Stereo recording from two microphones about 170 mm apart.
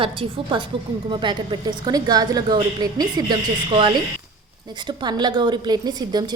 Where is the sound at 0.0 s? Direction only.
30° right (ahead or behind).